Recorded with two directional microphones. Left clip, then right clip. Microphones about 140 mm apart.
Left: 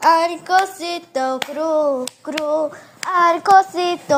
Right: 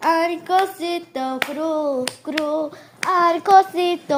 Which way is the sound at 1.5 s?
25° left (ahead or behind).